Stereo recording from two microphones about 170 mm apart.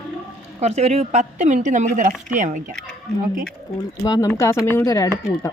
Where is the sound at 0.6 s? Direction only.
40° right (ahead or behind).